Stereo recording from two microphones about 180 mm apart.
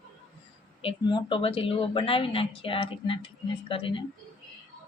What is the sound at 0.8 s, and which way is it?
A woman's voice, 30° left (ahead or behind).